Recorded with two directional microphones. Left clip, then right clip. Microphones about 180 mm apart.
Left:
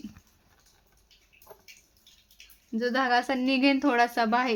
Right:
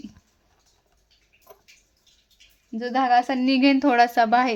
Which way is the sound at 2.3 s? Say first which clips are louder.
Even; 15° right (ahead or behind).